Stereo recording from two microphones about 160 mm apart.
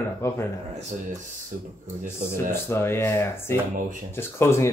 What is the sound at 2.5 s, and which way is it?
A man's voice, 15° left (ahead or behind).